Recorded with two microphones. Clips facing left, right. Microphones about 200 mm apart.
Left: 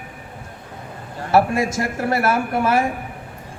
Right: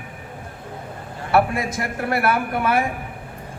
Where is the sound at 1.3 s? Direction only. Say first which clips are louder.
Left 2 dB; 55° right (ahead or behind).